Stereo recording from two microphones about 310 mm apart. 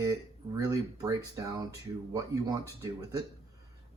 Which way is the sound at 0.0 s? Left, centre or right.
Centre.